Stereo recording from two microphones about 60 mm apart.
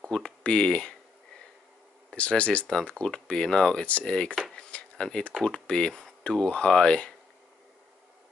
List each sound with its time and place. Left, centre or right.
0.0 s speech: centre
2.0 s speech: left
4.6 s a sound: centre
5.4 s speech: centre